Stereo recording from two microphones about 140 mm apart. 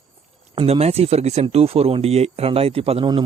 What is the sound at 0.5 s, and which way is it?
Speech, 45° right (ahead or behind).